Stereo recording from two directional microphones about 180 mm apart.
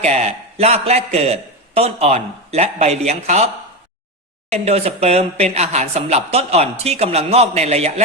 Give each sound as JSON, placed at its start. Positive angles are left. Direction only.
{"t": 0.0, "sound": "speech", "side_deg": -35}